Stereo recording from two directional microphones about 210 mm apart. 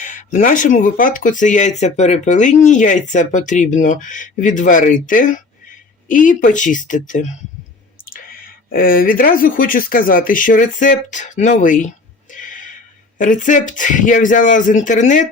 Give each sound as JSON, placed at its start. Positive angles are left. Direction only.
{"t": 0.0, "sound": "speech", "side_deg": 35}
{"t": 12.3, "sound": "a sound", "side_deg": 40}
{"t": 13.1, "sound": "speech", "side_deg": 40}